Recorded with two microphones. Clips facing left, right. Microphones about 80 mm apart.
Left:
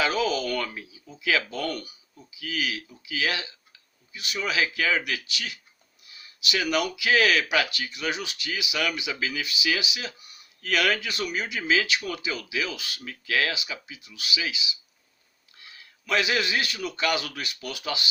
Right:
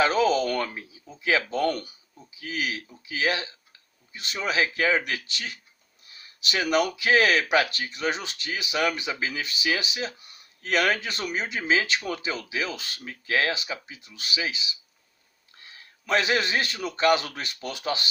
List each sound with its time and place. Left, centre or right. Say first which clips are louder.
0.0 s speech: right 4 dB; right
15.5 s a sound: even; right
16.0 s speech: right 1 dB; right